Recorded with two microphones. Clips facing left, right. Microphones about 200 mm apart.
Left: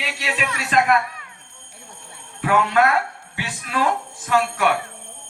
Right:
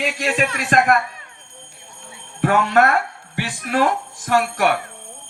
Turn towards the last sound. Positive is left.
turn(degrees=-50)  # may be behind; listen again after turning